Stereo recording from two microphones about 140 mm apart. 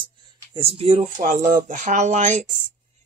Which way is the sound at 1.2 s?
70° right (ahead or behind).